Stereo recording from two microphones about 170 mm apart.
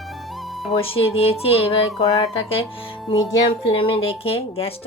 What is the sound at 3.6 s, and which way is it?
Speech, 30° left (ahead or behind).